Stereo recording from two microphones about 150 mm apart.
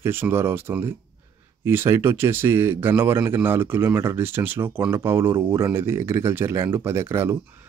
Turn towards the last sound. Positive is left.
turn(degrees=-15)  # may be behind; listen again after turning